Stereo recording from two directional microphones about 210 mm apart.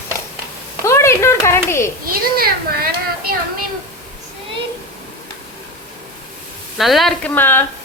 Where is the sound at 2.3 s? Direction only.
45° right (ahead or behind).